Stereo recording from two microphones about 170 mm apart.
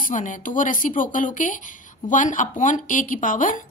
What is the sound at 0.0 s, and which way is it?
Speech, 50° left (ahead or behind).